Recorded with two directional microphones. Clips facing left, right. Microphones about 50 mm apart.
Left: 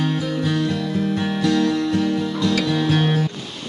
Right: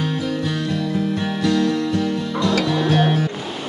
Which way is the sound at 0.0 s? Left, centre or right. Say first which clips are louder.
Left 1 dB; centre.